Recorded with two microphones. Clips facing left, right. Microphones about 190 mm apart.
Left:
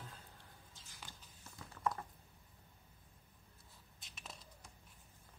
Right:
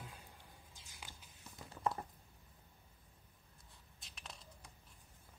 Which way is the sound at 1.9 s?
30° right (ahead or behind).